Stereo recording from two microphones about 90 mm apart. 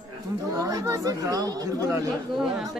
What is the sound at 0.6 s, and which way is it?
Speech, 40° right (ahead or behind).